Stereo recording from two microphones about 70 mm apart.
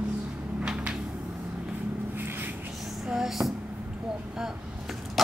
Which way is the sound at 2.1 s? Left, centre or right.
Right.